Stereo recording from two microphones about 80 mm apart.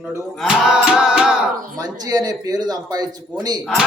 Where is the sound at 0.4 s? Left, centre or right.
Centre.